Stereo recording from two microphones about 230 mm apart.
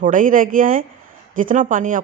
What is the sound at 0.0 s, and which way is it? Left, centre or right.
Speech, right.